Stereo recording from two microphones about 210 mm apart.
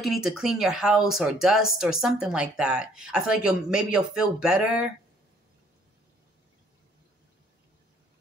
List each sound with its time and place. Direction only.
0.0 s speech: centre (ahead or behind)